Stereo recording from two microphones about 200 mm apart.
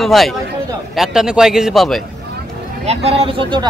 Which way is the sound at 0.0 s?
Centre (ahead or behind).